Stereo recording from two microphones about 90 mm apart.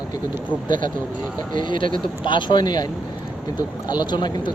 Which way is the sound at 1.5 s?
60° left (ahead or behind).